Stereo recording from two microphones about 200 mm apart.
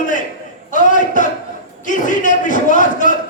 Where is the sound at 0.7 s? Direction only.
40° left (ahead or behind).